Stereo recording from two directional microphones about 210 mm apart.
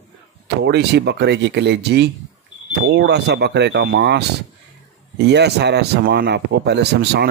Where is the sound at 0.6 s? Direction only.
55° right (ahead or behind).